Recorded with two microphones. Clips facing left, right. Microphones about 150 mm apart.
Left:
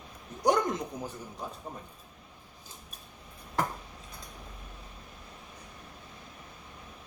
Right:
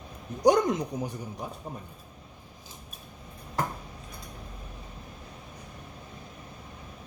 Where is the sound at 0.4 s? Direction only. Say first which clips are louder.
Right 5 dB; 15° right (ahead or behind).